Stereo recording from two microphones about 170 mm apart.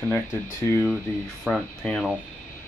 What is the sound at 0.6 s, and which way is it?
Speech, 25° left (ahead or behind).